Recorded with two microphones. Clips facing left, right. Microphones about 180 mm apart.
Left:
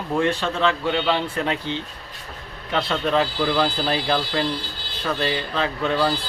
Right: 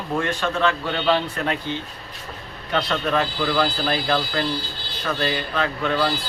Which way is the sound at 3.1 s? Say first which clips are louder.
Left 2 dB; 20° left (ahead or behind).